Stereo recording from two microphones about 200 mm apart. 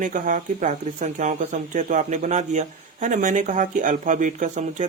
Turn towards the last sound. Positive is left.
turn(degrees=-40)  # may be behind; listen again after turning